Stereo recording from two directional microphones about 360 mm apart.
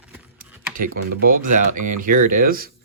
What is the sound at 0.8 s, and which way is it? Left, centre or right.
Speech, right.